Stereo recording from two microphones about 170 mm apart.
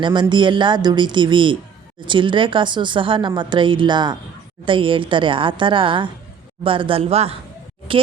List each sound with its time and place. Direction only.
0.0 s speech: 25° right (ahead or behind)